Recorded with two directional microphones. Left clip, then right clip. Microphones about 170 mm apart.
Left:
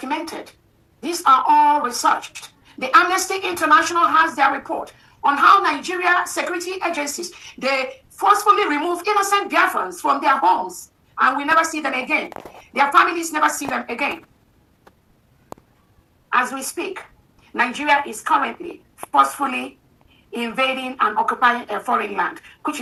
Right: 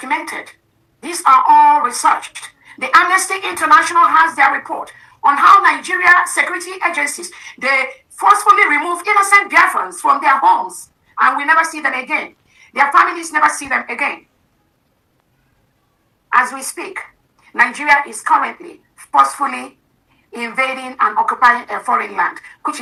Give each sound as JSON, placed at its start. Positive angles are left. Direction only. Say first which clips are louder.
{"t": 0.0, "sound": "speech", "louder": "right 6 dB", "side_deg": 30}
{"t": 16.3, "sound": "a woman's voice", "louder": "right 5 dB", "side_deg": 30}